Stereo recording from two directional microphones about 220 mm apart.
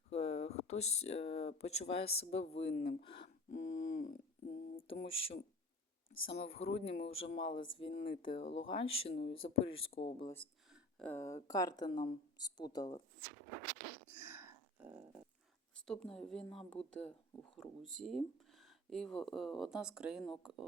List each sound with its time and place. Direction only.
0.1 s speech: 30° left (ahead or behind)
2.5 s a sound: 30° left (ahead or behind)
6.2 s speech: 25° left (ahead or behind)
10.2 s speech: 10° left (ahead or behind)
14.2 s a sound: 10° right (ahead or behind)
15.9 s speech: 5° left (ahead or behind)